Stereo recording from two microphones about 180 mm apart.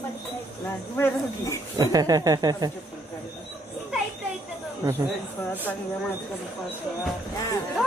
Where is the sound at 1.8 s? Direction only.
20° right (ahead or behind).